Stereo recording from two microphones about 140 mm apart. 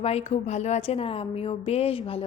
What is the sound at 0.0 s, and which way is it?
A woman's voice, 45° left (ahead or behind).